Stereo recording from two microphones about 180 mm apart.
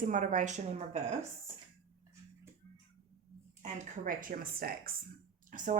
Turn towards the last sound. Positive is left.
turn(degrees=-45)  # may be behind; listen again after turning